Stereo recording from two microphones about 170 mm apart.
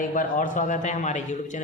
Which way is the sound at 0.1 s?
50° left (ahead or behind).